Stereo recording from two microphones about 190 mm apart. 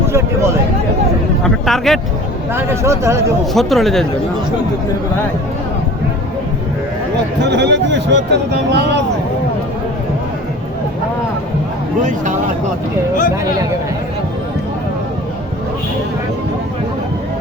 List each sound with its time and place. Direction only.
0.1 s speech: 15° right (ahead or behind)
1.5 s speech: centre (ahead or behind)
2.5 s a man's voice: 10° right (ahead or behind)
3.5 s speech: centre (ahead or behind)
7.4 s speech: 65° right (ahead or behind)